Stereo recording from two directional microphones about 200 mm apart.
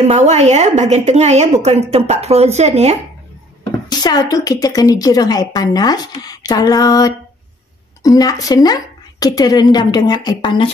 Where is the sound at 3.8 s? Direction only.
20° left (ahead or behind).